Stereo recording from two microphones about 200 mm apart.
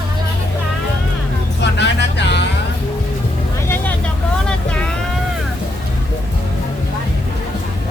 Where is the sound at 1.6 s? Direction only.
60° left (ahead or behind).